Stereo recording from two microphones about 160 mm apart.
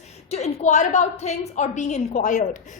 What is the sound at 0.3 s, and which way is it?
A woman's voice, 45° left (ahead or behind).